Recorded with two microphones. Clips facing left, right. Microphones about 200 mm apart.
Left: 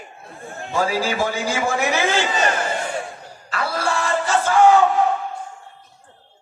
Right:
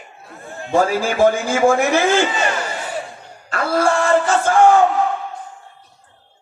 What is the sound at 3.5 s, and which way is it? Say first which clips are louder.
Music: right 6 dB; 50° right (ahead or behind).